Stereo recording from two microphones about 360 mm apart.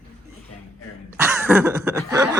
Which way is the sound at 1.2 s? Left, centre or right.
Centre.